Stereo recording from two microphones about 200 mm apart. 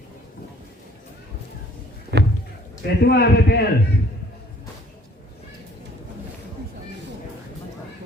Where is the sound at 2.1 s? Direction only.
55° right (ahead or behind).